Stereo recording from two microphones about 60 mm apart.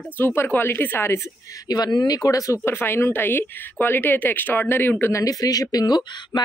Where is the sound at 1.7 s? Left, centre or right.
Left.